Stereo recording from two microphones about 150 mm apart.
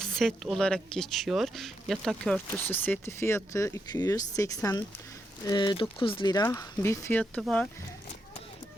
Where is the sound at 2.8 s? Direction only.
15° left (ahead or behind).